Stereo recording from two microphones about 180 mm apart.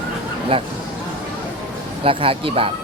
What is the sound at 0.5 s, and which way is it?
Speech, 30° right (ahead or behind).